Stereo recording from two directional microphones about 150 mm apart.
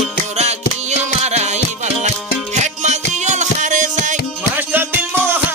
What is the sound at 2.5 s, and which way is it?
Music, 50° right (ahead or behind).